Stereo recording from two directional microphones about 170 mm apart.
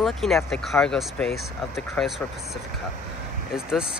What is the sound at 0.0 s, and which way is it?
Speech, centre (ahead or behind).